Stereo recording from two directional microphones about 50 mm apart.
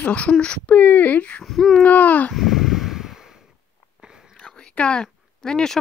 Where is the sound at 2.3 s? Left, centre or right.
Centre.